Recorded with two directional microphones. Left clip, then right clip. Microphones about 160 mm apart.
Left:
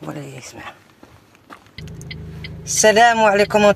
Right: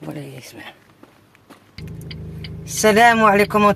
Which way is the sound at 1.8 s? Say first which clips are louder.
Right 1 dB; 35° right (ahead or behind).